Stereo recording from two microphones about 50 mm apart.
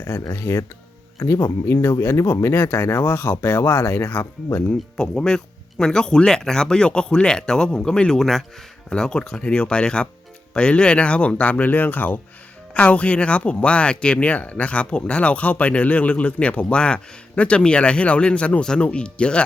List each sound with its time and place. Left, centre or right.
0.0 s speech: left
3.1 s speech: left
4.9 s speech: centre